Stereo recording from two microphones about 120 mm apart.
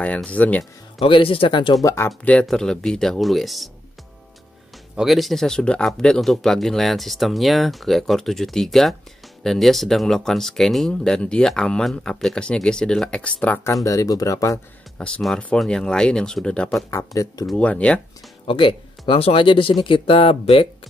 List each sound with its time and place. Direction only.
0.0 s speech: 10° left (ahead or behind)
0.9 s speech: 50° left (ahead or behind)
1.8 s speech: 25° left (ahead or behind)
2.2 s speech: 5° left (ahead or behind)
4.9 s speech: centre (ahead or behind)
13.8 s speech: 30° left (ahead or behind)
15.0 s speech: 10° left (ahead or behind)
16.9 s speech: 25° left (ahead or behind)
17.5 s speech: 10° left (ahead or behind)
18.5 s speech: 45° left (ahead or behind)